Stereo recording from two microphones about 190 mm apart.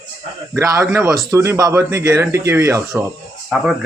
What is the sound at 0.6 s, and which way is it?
A man's voice, 15° right (ahead or behind).